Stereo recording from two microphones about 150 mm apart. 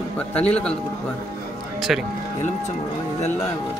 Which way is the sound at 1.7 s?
Centre (ahead or behind).